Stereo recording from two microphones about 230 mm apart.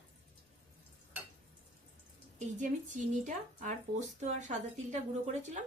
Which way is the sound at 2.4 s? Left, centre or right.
Right.